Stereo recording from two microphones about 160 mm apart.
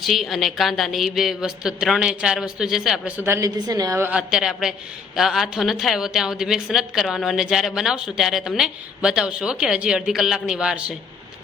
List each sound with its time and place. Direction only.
0.0 s speech: centre (ahead or behind)
3.2 s a woman's voice: 20° right (ahead or behind)
4.2 s speech: centre (ahead or behind)